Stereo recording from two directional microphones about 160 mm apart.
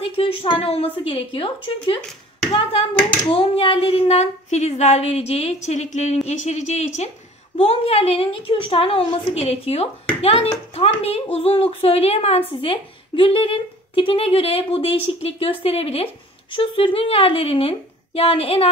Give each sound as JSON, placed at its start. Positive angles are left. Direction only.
{"t": 0.0, "sound": "speech", "side_deg": 35}
{"t": 3.3, "sound": "a sound", "side_deg": 35}
{"t": 7.5, "sound": "speech", "side_deg": 40}